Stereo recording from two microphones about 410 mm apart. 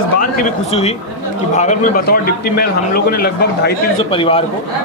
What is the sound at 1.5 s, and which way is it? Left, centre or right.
A man's voice, centre.